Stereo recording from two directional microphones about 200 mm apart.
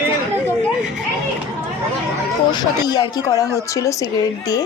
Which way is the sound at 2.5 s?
20° left (ahead or behind).